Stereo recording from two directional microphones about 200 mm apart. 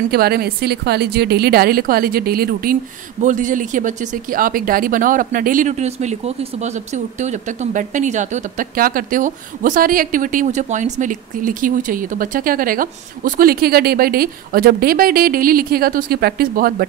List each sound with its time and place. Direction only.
0.1 s a woman's voice: 50° right (ahead or behind)